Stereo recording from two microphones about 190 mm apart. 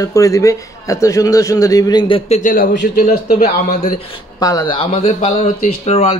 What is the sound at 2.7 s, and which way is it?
Speech, 65° left (ahead or behind).